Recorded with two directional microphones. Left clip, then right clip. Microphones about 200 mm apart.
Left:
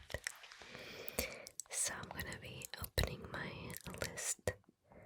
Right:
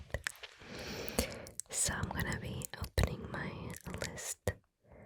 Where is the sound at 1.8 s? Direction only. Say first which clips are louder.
Right 7 dB; 40° right (ahead or behind).